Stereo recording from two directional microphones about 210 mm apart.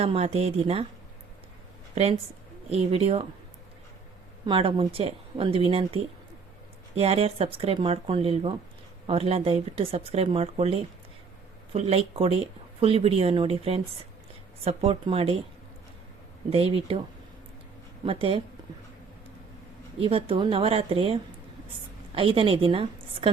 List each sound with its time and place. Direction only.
0.0 s speech: 30° right (ahead or behind)
2.0 s speech: 30° right (ahead or behind)
4.4 s speech: 25° right (ahead or behind)
16.5 s speech: 30° right (ahead or behind)
18.0 s speech: 25° right (ahead or behind)
20.0 s a woman's voice: 25° right (ahead or behind)